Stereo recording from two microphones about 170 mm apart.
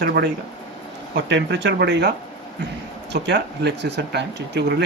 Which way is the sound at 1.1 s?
90° right.